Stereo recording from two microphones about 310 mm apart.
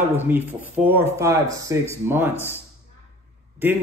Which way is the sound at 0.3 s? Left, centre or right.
Centre.